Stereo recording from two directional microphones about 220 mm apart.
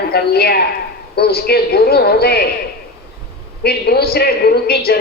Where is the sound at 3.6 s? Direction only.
45° left (ahead or behind).